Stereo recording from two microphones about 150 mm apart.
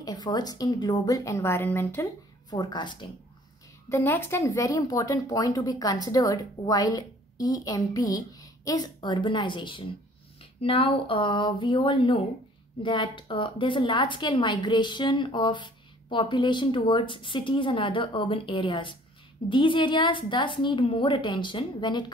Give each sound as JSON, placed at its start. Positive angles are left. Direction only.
{"t": 0.0, "sound": "speech", "side_deg": 25}
{"t": 2.5, "sound": "speech", "side_deg": 30}
{"t": 3.9, "sound": "a woman's voice", "side_deg": 15}